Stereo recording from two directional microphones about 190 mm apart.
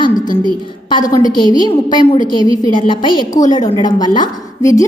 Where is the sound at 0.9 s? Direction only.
20° left (ahead or behind).